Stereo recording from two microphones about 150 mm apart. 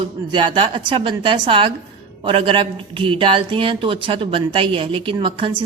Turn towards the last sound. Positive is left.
turn(degrees=-35)  # may be behind; listen again after turning